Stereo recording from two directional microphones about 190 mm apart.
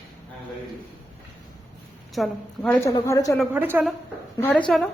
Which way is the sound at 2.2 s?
5° left (ahead or behind).